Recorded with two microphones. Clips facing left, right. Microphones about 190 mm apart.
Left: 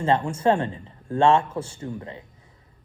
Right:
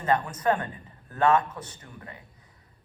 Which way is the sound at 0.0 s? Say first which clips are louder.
Left 4 dB; 25° left (ahead or behind).